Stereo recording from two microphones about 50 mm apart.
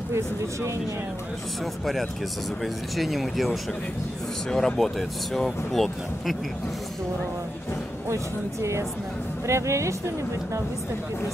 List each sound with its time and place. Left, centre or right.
2.6 s speech: centre
4.5 s speech: centre
8.1 s speech: right